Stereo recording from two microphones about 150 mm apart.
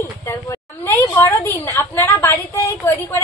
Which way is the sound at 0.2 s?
15° left (ahead or behind).